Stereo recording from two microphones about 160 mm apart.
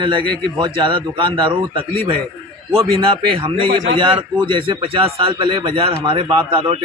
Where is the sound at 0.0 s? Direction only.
30° right (ahead or behind).